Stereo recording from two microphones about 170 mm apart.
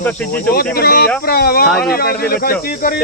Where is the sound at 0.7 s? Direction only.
65° left (ahead or behind).